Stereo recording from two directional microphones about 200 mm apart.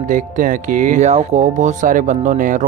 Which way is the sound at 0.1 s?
40° right (ahead or behind).